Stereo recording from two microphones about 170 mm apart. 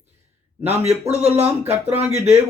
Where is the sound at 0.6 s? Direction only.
40° right (ahead or behind).